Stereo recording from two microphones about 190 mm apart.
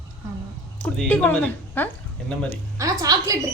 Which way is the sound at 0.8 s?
5° left (ahead or behind).